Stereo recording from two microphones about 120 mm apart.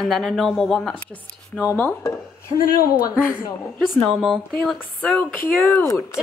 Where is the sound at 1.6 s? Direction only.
15° left (ahead or behind).